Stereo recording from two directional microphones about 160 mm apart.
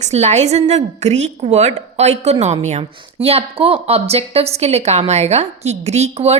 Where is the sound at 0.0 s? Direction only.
45° right (ahead or behind).